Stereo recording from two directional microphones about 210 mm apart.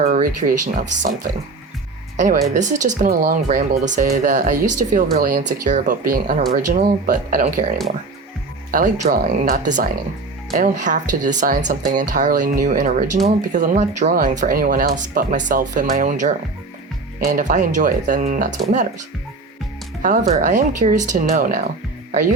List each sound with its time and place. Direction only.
0.0 s speech: 40° right (ahead or behind)
20.0 s speech: 35° right (ahead or behind)